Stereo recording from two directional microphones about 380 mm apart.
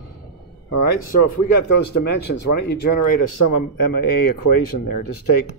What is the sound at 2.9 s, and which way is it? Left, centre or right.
Speech, left.